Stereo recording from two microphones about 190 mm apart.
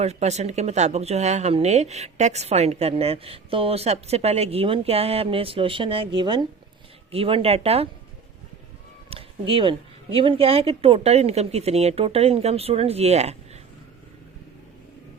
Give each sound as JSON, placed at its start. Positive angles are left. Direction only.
{"t": 0.0, "sound": "speech", "side_deg": -35}
{"t": 9.0, "sound": "speech", "side_deg": -30}